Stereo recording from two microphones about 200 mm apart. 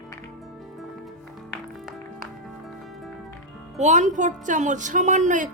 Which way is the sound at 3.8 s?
35° right (ahead or behind).